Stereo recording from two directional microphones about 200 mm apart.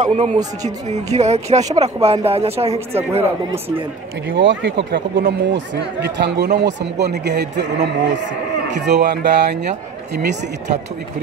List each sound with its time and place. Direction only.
0.0 s speech: 35° right (ahead or behind)
4.4 s a man's voice: 65° right (ahead or behind)